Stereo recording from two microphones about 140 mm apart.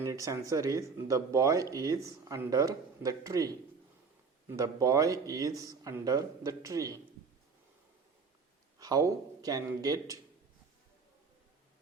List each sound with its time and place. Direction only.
0.0 s speech: 20° right (ahead or behind)
8.8 s speech: 25° right (ahead or behind)